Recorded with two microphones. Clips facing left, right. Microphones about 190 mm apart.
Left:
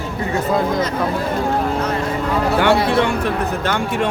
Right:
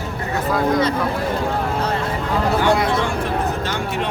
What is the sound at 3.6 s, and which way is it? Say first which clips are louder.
Speech: left 4 dB; 60° left (ahead or behind).